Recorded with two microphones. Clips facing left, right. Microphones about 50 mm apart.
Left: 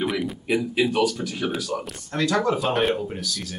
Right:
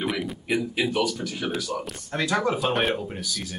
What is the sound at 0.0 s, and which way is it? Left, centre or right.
Speech, centre.